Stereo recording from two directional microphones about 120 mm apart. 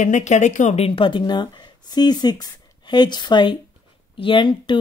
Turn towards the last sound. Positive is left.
turn(degrees=45)  # may be behind; listen again after turning